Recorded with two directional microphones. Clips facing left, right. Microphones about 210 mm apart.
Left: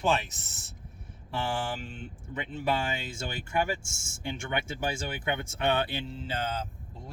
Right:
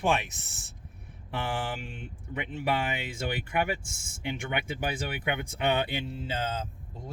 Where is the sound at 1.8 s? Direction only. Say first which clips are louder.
Left 1 dB; 10° right (ahead or behind).